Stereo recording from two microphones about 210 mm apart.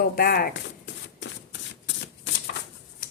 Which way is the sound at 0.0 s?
45° left (ahead or behind).